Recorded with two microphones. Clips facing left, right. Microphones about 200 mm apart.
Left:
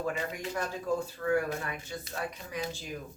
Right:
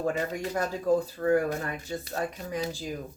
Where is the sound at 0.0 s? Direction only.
40° right (ahead or behind).